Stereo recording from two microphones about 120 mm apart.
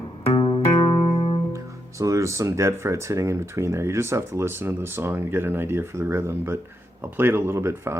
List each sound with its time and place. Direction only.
0.3 s music: 40° left (ahead or behind)
1.5 s speech: 25° right (ahead or behind)